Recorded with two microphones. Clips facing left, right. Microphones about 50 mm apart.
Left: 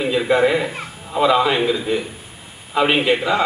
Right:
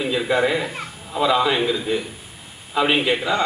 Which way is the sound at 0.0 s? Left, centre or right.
Centre.